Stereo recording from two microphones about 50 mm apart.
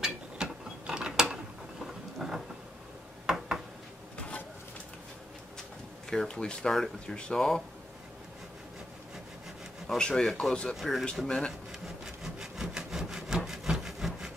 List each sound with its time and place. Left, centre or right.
0.0 s mechanisms: centre
2.1 s a sound: centre
6.0 s speech: centre
6.7 s speech: centre
9.9 s speech: centre
10.8 s speech: centre
11.2 s speech: centre
12.2 s sawing: centre
13.5 s wood: centre